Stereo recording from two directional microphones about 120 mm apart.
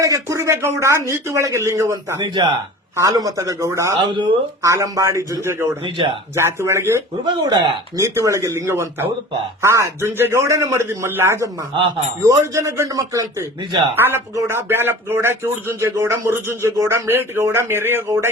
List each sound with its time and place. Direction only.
0.0 s speech: 25° right (ahead or behind)
2.2 s speech: 40° right (ahead or behind)
2.9 s speech: 25° right (ahead or behind)
4.0 s speech: 40° right (ahead or behind)
4.6 s speech: 25° right (ahead or behind)
7.3 s speech: 40° right (ahead or behind)
7.9 s speech: 25° right (ahead or behind)